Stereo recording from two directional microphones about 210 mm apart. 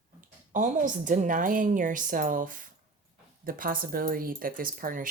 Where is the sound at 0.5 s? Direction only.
40° right (ahead or behind).